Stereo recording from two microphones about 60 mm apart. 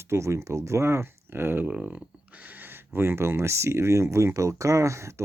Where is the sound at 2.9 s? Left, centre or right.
Right.